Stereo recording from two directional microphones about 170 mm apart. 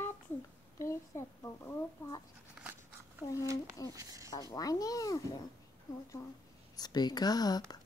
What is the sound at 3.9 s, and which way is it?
Speech, 20° right (ahead or behind).